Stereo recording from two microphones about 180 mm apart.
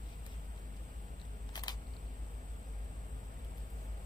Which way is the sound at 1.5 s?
25° left (ahead or behind).